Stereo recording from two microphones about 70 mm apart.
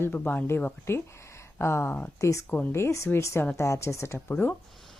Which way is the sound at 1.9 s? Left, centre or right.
Left.